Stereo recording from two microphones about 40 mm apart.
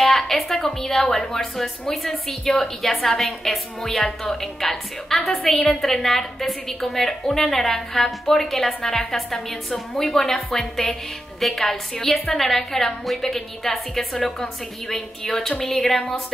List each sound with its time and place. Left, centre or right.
0.0 s a woman's voice: centre